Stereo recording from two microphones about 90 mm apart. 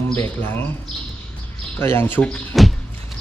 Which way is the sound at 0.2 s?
20° left (ahead or behind).